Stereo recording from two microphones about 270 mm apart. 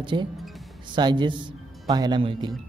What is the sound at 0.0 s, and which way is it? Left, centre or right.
Speech, centre.